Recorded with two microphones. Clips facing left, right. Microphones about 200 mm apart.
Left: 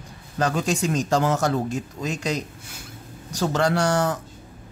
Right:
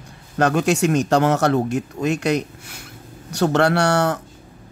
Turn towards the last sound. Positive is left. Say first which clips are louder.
# right 3 dB
turn(degrees=-70)  # may be behind; listen again after turning